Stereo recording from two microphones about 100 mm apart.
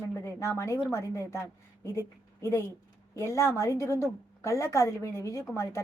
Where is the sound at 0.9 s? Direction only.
25° left (ahead or behind).